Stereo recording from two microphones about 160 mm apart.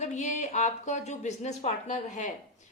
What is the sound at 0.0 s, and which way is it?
Speech, 50° left (ahead or behind).